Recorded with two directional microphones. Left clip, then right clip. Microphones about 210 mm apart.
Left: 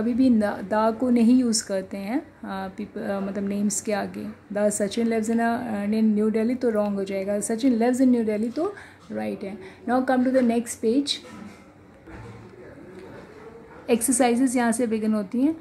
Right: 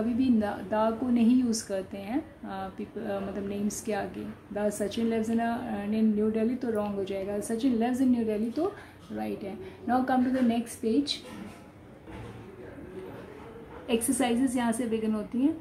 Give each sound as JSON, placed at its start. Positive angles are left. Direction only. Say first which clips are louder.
{"t": 0.2, "sound": "a woman's voice", "louder": "left 8 dB", "side_deg": 50}
{"t": 13.8, "sound": "a woman's voice", "louder": "left 7 dB", "side_deg": 50}